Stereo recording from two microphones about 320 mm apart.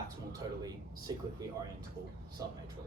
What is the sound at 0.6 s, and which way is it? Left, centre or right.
Speech, centre.